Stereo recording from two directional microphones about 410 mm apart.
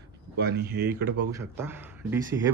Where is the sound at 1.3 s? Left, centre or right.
Centre.